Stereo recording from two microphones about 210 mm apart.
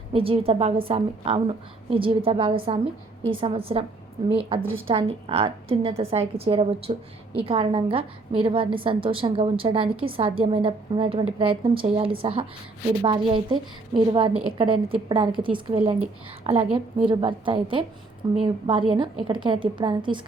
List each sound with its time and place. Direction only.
0.1 s a woman's voice: 25° right (ahead or behind)